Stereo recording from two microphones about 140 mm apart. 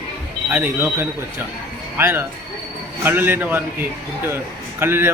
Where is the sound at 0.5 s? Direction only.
15° right (ahead or behind).